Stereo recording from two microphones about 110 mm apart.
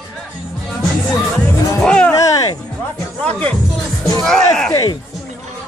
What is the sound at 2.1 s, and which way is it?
Music, 35° left (ahead or behind).